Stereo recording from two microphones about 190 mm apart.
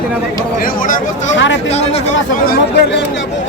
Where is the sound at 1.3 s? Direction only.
75° left (ahead or behind).